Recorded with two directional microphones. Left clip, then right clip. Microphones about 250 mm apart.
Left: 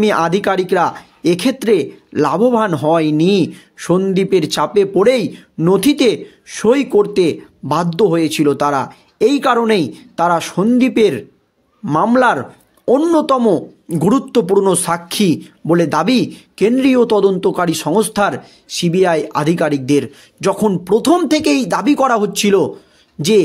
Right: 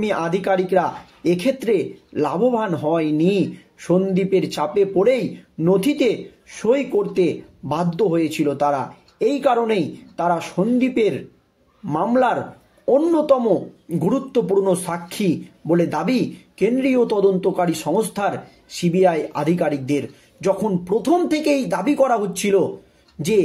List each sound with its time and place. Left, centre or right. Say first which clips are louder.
0.0 s speech: left 7 dB; left